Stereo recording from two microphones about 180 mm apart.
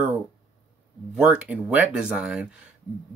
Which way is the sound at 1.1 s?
5° right (ahead or behind).